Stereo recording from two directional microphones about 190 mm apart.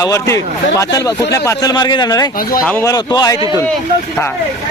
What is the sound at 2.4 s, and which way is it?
Speech, 50° left (ahead or behind).